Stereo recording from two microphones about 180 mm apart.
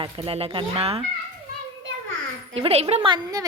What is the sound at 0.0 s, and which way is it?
Speech, 30° right (ahead or behind).